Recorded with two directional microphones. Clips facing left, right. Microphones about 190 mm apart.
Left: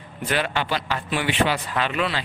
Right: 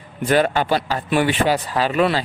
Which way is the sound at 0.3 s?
45° right (ahead or behind).